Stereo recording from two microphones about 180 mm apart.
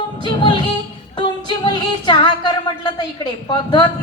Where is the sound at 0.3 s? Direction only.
25° left (ahead or behind).